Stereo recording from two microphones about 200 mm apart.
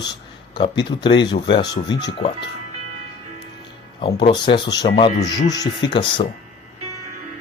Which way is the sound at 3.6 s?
25° left (ahead or behind).